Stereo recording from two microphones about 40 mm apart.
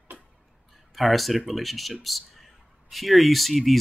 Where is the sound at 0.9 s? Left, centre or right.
Centre.